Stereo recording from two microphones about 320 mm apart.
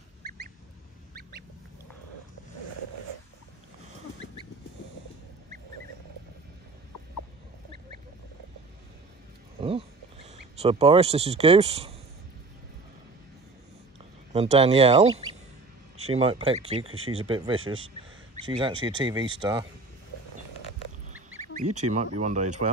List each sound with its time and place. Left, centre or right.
9.6 s a sound: centre
10.6 s speech: centre
14.3 s speech: centre
21.4 s speech: right